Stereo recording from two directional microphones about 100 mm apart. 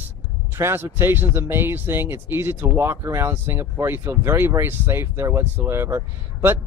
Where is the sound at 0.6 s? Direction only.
25° right (ahead or behind).